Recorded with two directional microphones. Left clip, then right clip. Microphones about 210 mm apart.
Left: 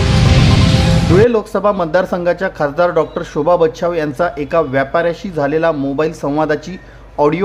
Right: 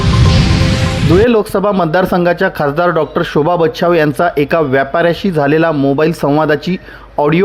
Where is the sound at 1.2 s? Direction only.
30° right (ahead or behind).